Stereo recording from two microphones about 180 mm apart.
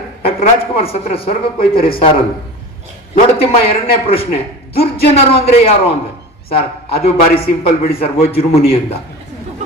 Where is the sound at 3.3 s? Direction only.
35° left (ahead or behind).